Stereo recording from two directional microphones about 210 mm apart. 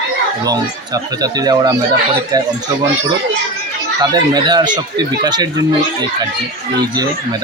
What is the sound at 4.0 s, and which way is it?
Speech, 20° right (ahead or behind).